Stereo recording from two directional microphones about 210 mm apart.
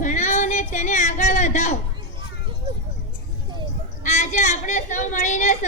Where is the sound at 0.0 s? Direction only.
35° left (ahead or behind).